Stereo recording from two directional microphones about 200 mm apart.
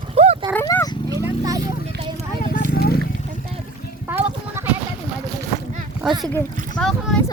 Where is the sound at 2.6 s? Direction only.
50° left (ahead or behind).